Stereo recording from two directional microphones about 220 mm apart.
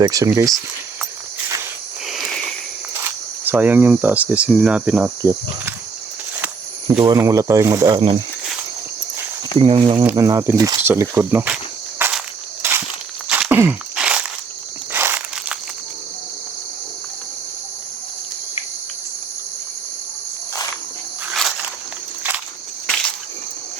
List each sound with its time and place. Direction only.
0.0 s cricket: 15° right (ahead or behind)
3.4 s cricket: 10° right (ahead or behind)
6.8 s cricket: 15° right (ahead or behind)
9.6 s speech: 20° right (ahead or behind)
10.0 s cricket: 10° right (ahead or behind)
12.6 s walk: 10° right (ahead or behind)
13.2 s a sound: 5° right (ahead or behind)
14.9 s walk: 10° right (ahead or behind)